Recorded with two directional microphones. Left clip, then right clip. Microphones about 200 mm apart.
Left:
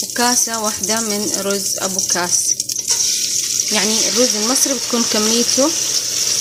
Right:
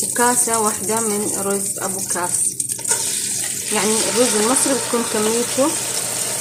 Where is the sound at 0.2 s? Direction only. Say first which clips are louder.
Even; 40° left (ahead or behind).